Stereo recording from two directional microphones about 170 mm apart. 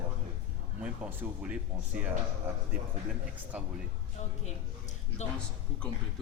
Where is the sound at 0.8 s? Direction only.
5° right (ahead or behind).